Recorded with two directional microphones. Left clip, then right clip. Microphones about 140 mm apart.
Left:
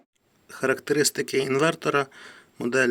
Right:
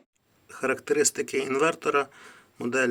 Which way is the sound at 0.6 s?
40° left (ahead or behind).